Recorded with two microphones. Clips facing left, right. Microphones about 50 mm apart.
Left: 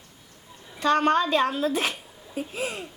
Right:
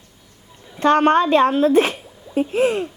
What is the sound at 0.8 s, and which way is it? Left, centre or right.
A woman's voice, right.